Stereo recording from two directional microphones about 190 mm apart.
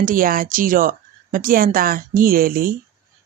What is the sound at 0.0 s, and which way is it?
A woman's voice, 45° right (ahead or behind).